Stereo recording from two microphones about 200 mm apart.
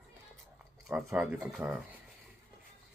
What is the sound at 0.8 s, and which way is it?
Speech, centre (ahead or behind).